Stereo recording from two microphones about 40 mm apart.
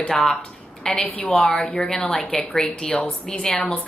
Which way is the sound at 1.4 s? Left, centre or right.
Left.